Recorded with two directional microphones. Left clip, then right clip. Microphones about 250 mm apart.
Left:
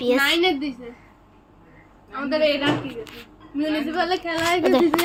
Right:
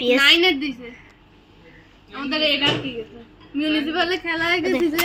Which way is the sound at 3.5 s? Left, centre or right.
Right.